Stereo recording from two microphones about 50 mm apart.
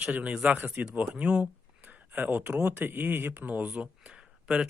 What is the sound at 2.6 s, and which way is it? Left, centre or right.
Speech, right.